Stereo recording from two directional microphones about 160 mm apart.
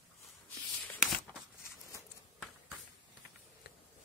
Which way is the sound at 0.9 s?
5° right (ahead or behind).